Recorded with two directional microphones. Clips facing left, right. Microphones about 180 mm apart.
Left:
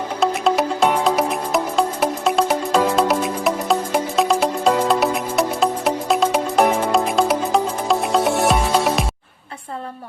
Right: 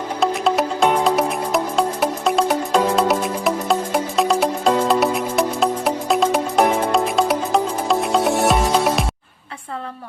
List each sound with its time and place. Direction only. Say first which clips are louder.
0.2 s music: even; centre (ahead or behind)